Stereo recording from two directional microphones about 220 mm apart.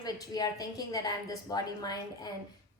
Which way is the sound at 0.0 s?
15° left (ahead or behind).